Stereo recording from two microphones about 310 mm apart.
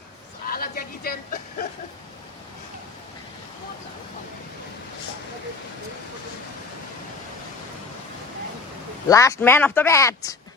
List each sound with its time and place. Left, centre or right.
0.4 s speech: left
9.0 s speech: centre